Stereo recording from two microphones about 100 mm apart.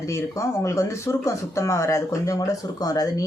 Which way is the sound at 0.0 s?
30° left (ahead or behind).